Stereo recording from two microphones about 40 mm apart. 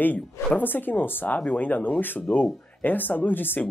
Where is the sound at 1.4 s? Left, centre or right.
Left.